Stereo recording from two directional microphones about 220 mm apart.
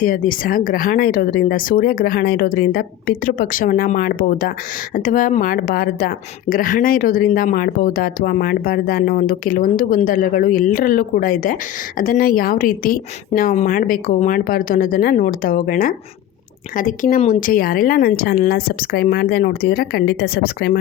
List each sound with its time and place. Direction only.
0.0 s a woman's voice: 40° left (ahead or behind)